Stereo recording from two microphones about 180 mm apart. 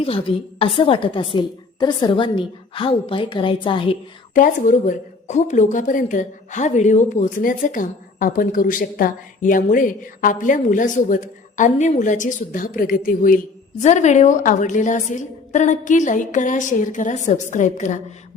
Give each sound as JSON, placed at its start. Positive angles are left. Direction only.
{"t": 0.0, "sound": "a woman's voice", "side_deg": 30}
{"t": 4.4, "sound": "a woman's voice", "side_deg": 45}